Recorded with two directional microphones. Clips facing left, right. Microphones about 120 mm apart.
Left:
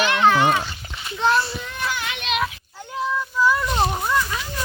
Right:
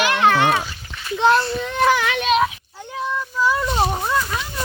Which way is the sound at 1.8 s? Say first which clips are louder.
Right 10 dB; 90° right.